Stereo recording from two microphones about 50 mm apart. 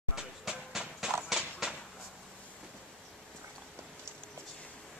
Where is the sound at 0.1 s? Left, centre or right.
Centre.